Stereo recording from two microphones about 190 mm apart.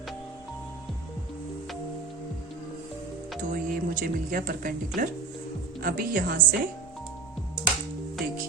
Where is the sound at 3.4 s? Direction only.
45° right (ahead or behind).